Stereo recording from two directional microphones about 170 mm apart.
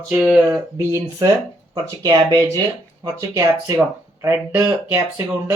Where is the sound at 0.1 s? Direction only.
Centre (ahead or behind).